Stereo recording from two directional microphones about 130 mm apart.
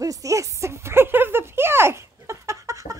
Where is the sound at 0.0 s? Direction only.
25° right (ahead or behind).